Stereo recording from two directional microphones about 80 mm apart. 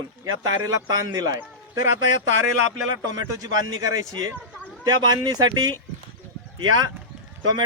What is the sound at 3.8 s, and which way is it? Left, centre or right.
Speech, right.